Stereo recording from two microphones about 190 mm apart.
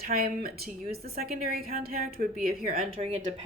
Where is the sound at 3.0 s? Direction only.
35° right (ahead or behind).